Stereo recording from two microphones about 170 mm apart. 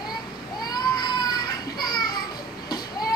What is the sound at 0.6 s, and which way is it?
Children playing, 25° left (ahead or behind).